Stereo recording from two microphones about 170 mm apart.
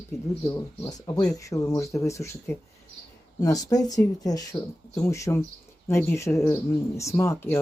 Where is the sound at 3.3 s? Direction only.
20° left (ahead or behind).